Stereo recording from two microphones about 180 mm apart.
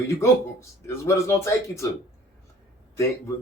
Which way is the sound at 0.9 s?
15° left (ahead or behind).